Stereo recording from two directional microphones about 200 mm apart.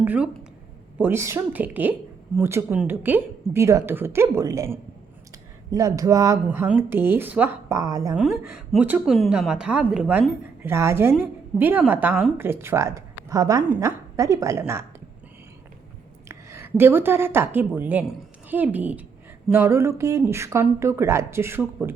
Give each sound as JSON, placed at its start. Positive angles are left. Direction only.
{"t": 0.0, "sound": "a woman's voice", "side_deg": -10}
{"t": 8.1, "sound": "a woman's voice", "side_deg": -5}
{"t": 16.3, "sound": "a woman's voice", "side_deg": -15}